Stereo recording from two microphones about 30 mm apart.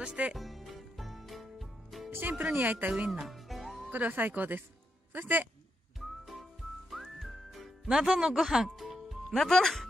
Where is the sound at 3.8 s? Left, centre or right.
Right.